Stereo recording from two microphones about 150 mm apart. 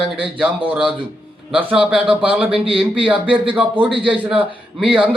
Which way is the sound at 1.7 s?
5° right (ahead or behind).